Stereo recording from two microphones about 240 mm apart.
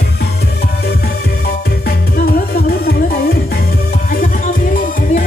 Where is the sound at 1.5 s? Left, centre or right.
Left.